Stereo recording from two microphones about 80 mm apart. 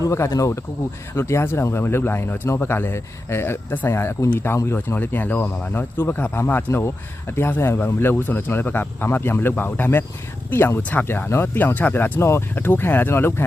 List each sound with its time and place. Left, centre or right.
0.0 s speech: left
4.9 s speech: left